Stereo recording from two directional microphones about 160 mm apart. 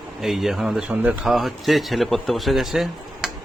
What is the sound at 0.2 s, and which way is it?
Speech, centre (ahead or behind).